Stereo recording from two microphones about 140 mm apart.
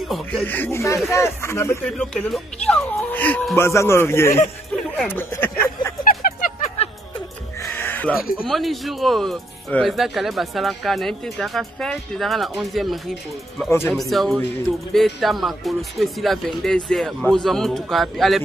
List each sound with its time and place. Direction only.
0.1 s speech: centre (ahead or behind)
0.5 s speech: 15° left (ahead or behind)
2.0 s speech: centre (ahead or behind); by 4.4 s 20° left (ahead or behind)
5.0 s a sound: 15° left (ahead or behind)
6.0 s a sound: 90° left
7.7 s music: 15° left (ahead or behind)
8.4 s speech: centre (ahead or behind)